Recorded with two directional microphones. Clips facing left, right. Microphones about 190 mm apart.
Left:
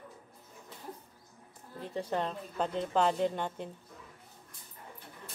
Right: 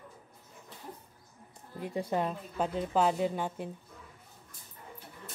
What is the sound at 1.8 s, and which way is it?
A woman's voice, 10° right (ahead or behind).